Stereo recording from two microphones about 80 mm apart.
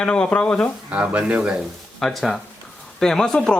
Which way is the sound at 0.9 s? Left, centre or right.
Centre.